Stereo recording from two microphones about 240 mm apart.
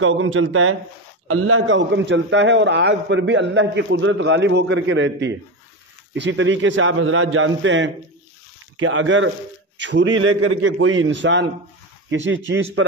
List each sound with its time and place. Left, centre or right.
0.0 s a man's voice: right